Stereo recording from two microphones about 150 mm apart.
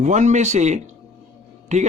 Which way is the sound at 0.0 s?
50° right (ahead or behind).